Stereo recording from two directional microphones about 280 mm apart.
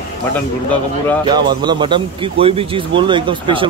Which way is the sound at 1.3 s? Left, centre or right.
Centre.